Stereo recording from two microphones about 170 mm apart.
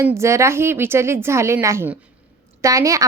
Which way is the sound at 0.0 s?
15° right (ahead or behind).